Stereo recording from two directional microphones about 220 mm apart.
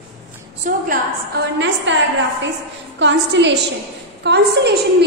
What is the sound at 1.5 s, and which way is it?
A woman's voice, 55° right (ahead or behind).